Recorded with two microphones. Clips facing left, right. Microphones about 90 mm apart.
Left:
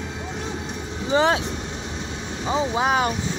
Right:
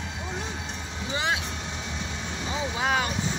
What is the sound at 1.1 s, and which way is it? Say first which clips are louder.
Speech: left 10 dB; 35° left (ahead or behind).